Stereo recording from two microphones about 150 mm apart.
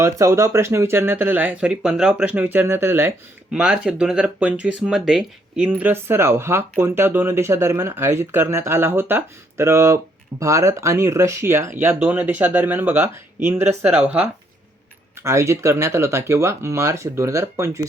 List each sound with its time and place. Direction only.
0.0 s speech: 20° right (ahead or behind)
15.2 s speech: 20° right (ahead or behind)